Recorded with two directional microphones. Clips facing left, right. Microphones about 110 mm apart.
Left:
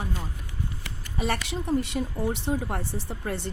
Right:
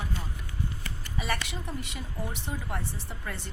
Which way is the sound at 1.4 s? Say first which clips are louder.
Left 11 dB; 35° left (ahead or behind).